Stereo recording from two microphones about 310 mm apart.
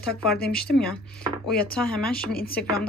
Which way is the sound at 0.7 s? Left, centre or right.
Centre.